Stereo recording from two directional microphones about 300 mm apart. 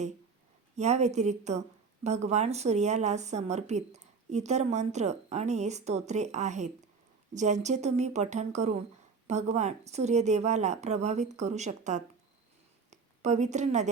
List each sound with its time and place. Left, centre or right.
0.8 s a woman's voice: right